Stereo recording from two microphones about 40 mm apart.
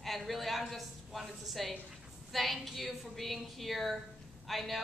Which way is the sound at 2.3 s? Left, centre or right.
Centre.